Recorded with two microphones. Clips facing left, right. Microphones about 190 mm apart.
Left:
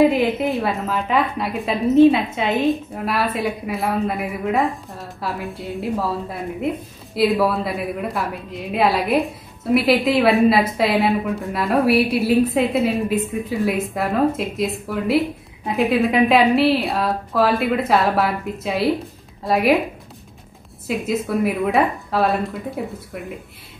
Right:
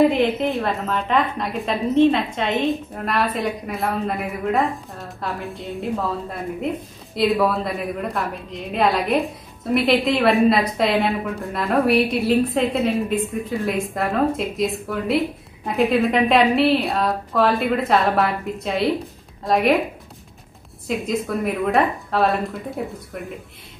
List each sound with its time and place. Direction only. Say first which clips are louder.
0.0 s a woman's voice: left 1 dB; centre (ahead or behind)
7.2 s a woman's voice: left 1 dB; 5° left (ahead or behind)
20.8 s a woman's voice: left 1 dB; 5° left (ahead or behind)